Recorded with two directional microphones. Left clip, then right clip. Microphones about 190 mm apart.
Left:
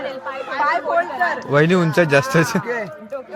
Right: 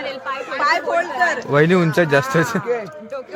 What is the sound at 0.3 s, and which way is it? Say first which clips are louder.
Speech: right 1 dB; 70° right (ahead or behind).